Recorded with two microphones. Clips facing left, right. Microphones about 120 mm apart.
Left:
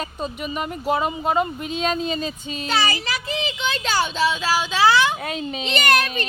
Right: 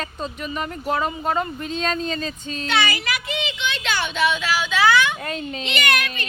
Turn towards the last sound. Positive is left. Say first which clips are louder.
# left 3 dB
turn(degrees=35)  # may be behind; listen again after turning